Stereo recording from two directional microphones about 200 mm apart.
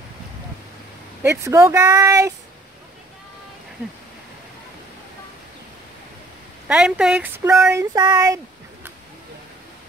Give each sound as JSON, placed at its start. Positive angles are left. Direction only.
{"t": 1.2, "sound": "speech", "side_deg": -10}
{"t": 6.7, "sound": "speech", "side_deg": -5}